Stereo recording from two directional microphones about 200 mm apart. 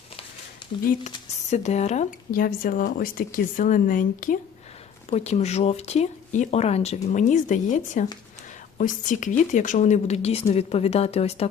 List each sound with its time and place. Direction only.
1.1 s speech: 35° left (ahead or behind)